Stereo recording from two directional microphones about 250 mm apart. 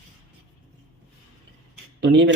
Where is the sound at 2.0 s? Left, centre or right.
Right.